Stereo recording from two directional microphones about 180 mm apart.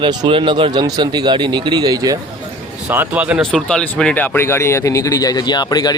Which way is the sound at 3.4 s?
5° left (ahead or behind).